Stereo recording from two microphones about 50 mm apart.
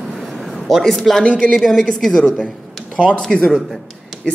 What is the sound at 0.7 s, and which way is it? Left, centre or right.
Speech, centre.